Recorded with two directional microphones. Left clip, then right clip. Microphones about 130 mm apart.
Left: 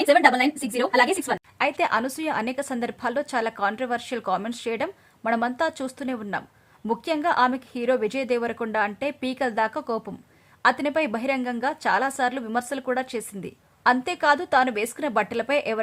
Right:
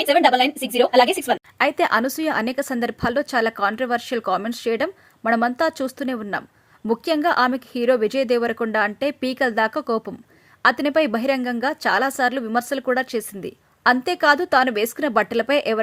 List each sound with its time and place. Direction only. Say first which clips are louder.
1.5 s a woman's voice: right 4 dB; 30° right (ahead or behind)